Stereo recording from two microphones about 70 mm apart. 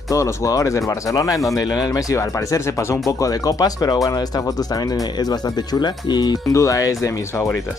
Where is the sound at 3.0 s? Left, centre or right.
Left.